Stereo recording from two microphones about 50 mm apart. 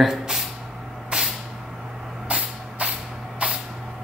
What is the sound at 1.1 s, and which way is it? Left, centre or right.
Vehicle, centre.